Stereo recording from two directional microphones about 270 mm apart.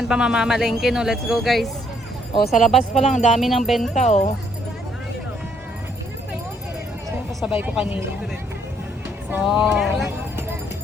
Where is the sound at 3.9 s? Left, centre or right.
Left.